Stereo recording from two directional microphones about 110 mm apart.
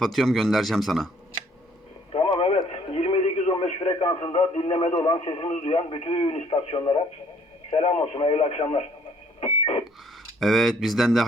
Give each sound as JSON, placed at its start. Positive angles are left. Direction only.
{"t": 0.0, "sound": "a man's voice", "side_deg": 0}
{"t": 2.1, "sound": "radio", "side_deg": 50}
{"t": 5.5, "sound": "a man's voice", "side_deg": 65}
{"t": 9.4, "sound": "a sound", "side_deg": 65}
{"t": 10.4, "sound": "a man's voice", "side_deg": 0}